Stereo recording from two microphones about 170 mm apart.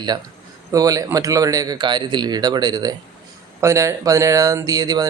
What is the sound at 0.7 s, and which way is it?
Speech, 20° right (ahead or behind).